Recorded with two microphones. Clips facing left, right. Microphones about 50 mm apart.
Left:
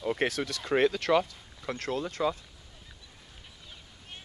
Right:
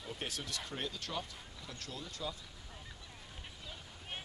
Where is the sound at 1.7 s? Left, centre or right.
Left.